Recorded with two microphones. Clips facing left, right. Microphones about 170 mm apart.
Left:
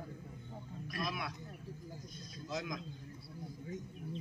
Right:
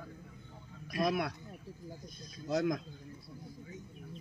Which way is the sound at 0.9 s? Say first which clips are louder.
Right 9 dB; 50° right (ahead or behind).